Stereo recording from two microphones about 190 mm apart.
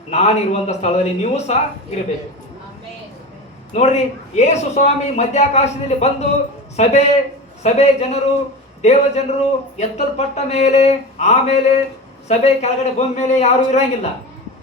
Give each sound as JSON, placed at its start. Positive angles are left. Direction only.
{"t": 0.1, "sound": "a man's voice", "side_deg": 35}
{"t": 3.8, "sound": "a man's voice", "side_deg": 35}